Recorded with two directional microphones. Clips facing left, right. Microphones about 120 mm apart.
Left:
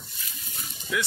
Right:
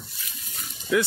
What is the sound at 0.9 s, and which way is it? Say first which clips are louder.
Speech: right 7 dB; 35° right (ahead or behind).